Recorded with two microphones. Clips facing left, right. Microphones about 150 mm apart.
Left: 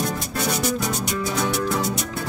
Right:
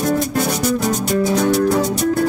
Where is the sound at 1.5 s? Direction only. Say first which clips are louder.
Right 9 dB; 45° right (ahead or behind).